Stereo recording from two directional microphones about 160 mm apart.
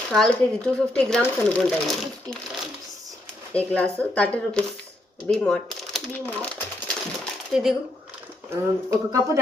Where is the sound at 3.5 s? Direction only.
10° left (ahead or behind).